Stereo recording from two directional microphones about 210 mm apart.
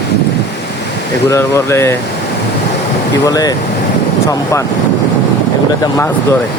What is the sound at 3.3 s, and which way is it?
Speech, 15° left (ahead or behind).